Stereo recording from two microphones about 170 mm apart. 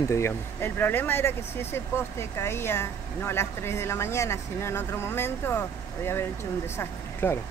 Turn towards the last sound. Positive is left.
turn(degrees=15)  # may be behind; listen again after turning